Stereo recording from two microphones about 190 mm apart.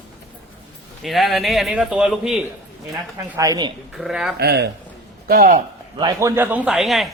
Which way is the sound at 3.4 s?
20° right (ahead or behind).